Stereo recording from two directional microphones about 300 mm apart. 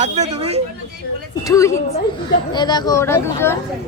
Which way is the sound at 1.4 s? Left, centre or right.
Centre.